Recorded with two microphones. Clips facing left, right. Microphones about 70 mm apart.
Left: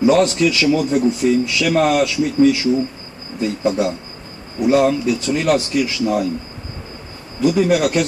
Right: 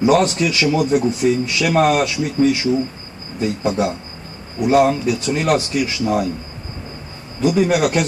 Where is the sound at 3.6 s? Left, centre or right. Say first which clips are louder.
Left 2 dB; right.